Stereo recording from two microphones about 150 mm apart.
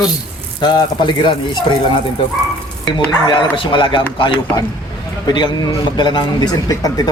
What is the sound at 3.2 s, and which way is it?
A man's voice, 30° left (ahead or behind).